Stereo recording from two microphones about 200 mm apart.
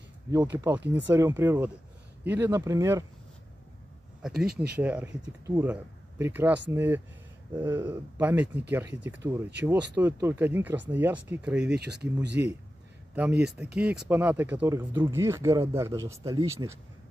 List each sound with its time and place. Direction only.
0.3 s speech: 15° right (ahead or behind)
4.7 s speech: 10° right (ahead or behind)
11.7 s speech: 55° right (ahead or behind)
13.1 s speech: 5° right (ahead or behind)